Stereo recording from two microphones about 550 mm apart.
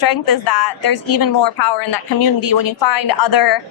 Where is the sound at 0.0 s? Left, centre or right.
Left.